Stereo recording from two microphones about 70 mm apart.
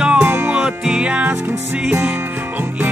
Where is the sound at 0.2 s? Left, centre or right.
Right.